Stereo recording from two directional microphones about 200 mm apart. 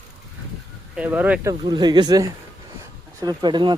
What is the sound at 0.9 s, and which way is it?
Speech, 5° right (ahead or behind).